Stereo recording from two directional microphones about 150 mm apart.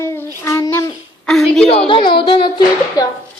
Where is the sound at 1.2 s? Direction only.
5° left (ahead or behind).